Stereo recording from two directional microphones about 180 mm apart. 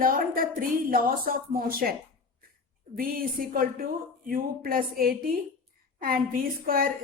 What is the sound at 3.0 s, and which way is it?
A woman's voice, 55° right (ahead or behind).